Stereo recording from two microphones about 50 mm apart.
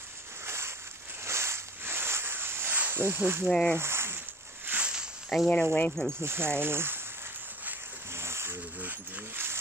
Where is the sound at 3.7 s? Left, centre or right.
Right.